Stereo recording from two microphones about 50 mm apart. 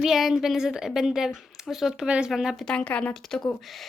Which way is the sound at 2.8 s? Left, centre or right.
Left.